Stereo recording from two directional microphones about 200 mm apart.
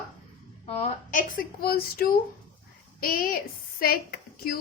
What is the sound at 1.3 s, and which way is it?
Speech, 45° left (ahead or behind).